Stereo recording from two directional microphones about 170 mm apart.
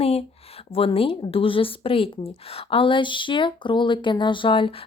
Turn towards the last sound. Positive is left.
turn(degrees=30)  # may be behind; listen again after turning